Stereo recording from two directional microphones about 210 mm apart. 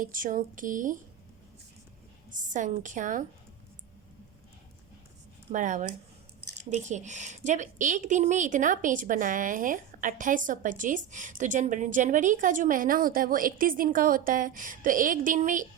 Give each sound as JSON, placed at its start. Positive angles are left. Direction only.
{"t": 0.0, "sound": "a woman's voice", "side_deg": -40}
{"t": 2.3, "sound": "a woman's voice", "side_deg": -35}
{"t": 5.5, "sound": "a woman's voice", "side_deg": -35}